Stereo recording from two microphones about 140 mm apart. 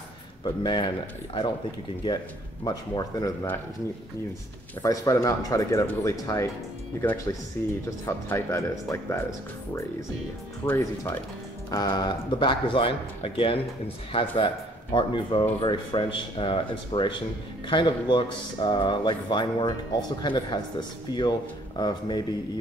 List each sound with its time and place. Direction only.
0.4 s speech: 30° left (ahead or behind)
2.6 s speech: 30° left (ahead or behind)
4.8 s speech: 25° left (ahead or behind)
7.6 s speech: 15° left (ahead or behind)
10.6 s speech: 25° left (ahead or behind)